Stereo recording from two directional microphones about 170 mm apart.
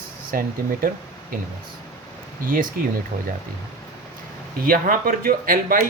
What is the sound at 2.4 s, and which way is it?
Speech, 55° right (ahead or behind).